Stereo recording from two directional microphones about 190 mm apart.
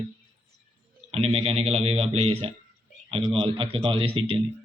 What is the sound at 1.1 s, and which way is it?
Speech, 30° right (ahead or behind).